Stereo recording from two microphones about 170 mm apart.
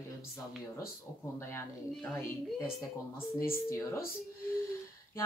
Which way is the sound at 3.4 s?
15° left (ahead or behind).